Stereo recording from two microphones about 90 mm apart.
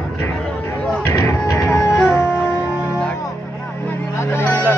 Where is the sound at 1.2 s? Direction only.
45° left (ahead or behind).